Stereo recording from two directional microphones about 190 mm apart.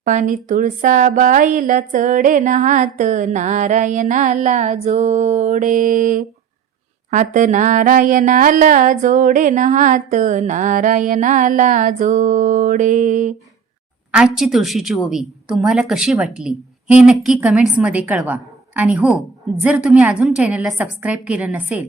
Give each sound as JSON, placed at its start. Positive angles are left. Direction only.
{"t": 0.0, "sound": "a woman's voice", "side_deg": -40}
{"t": 7.1, "sound": "a sound", "side_deg": -40}
{"t": 14.1, "sound": "a woman's voice", "side_deg": -5}